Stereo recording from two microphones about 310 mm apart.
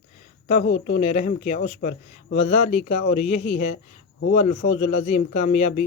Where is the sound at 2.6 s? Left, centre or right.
Left.